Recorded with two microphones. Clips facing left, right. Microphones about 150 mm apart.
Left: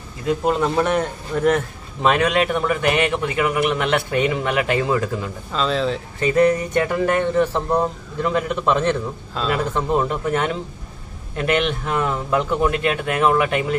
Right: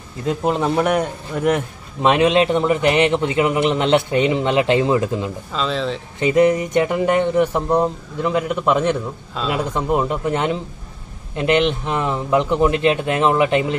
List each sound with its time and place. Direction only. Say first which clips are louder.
0.5 s a man's voice: right 2 dB; 15° right (ahead or behind)
5.5 s speech: left 2 dB; centre (ahead or behind)
6.1 s a man's voice: right 2 dB; 20° right (ahead or behind)